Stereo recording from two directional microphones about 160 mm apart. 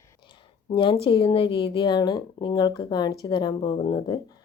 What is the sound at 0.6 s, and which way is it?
Speech, 30° left (ahead or behind).